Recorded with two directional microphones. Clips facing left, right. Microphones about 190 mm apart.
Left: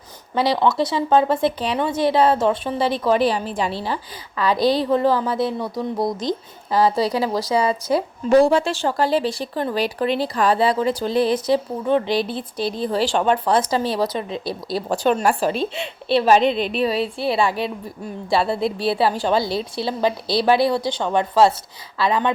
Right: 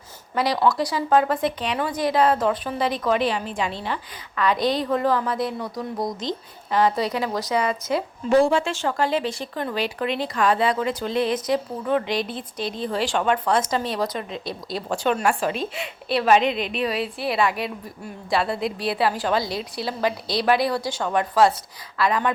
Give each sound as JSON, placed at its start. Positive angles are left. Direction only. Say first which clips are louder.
{"t": 0.3, "sound": "a woman's voice", "louder": "left 3 dB", "side_deg": 25}